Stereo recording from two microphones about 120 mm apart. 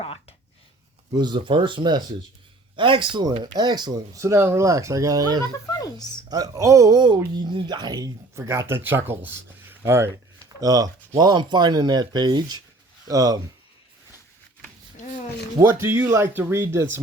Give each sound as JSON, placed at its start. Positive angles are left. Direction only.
{"t": 0.0, "sound": "a sound", "side_deg": 50}
{"t": 1.1, "sound": "speech", "side_deg": -40}
{"t": 5.7, "sound": "speech", "side_deg": 30}
{"t": 6.2, "sound": "speech", "side_deg": -35}
{"t": 8.4, "sound": "speech", "side_deg": -20}
{"t": 15.6, "sound": "speech", "side_deg": -20}